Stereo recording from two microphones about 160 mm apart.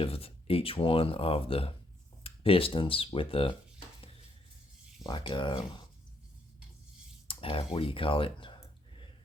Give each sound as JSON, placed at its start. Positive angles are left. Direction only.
{"t": 0.0, "sound": "speech", "side_deg": 35}
{"t": 5.0, "sound": "speech", "side_deg": 30}
{"t": 7.3, "sound": "speech", "side_deg": 35}